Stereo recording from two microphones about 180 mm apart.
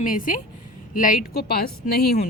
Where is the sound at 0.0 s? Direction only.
50° left (ahead or behind).